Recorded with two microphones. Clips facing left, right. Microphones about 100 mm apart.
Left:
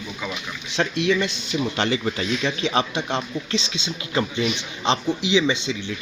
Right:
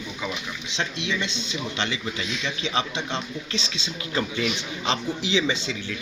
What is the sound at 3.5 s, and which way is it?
Speech, 35° right (ahead or behind).